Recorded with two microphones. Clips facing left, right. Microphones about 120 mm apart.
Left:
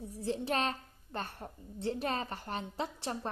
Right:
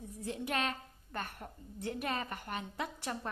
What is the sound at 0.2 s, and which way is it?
A woman's voice, 30° left (ahead or behind).